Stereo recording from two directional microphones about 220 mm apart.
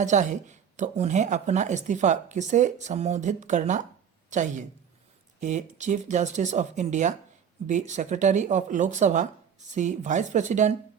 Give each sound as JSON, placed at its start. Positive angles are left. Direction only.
{"t": 0.0, "sound": "speech", "side_deg": -35}